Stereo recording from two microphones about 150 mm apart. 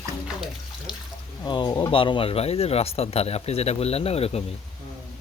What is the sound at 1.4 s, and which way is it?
Speech, 30° left (ahead or behind).